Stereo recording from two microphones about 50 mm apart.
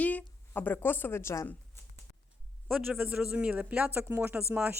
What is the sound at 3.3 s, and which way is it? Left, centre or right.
Speech, right.